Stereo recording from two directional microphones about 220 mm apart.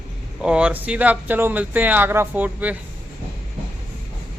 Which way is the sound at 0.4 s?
5° right (ahead or behind).